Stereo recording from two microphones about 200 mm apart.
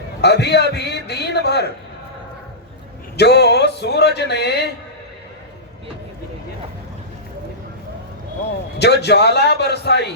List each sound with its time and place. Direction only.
0.2 s speech: 55° left (ahead or behind)
3.2 s speech: 55° left (ahead or behind)
8.8 s speech: 55° left (ahead or behind)